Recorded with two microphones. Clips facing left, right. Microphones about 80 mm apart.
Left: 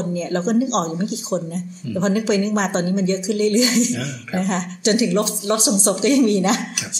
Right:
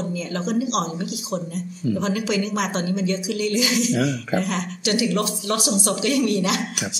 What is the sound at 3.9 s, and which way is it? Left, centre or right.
Speech, right.